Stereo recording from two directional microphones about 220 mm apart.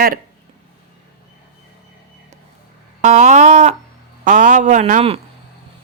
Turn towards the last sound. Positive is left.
turn(degrees=-30)  # may be behind; listen again after turning